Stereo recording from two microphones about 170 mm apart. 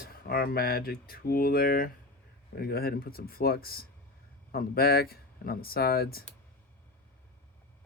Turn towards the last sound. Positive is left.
turn(degrees=65)  # may be behind; listen again after turning